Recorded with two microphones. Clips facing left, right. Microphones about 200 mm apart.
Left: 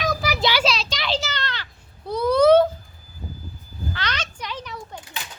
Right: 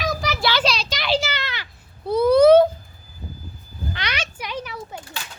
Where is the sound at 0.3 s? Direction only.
15° left (ahead or behind).